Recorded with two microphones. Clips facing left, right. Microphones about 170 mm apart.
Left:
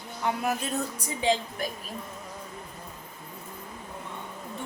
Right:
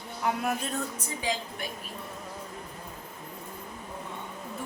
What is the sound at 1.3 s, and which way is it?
Speech, 30° left (ahead or behind).